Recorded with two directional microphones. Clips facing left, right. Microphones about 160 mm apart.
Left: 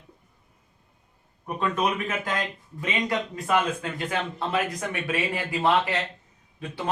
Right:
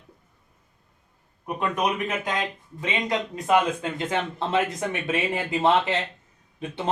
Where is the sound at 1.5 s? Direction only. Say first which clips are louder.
Even; 15° right (ahead or behind).